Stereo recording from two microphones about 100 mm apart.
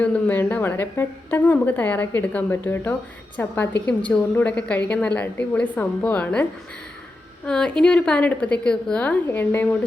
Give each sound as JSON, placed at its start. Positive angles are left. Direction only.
{"t": 0.0, "sound": "a woman's voice", "side_deg": 15}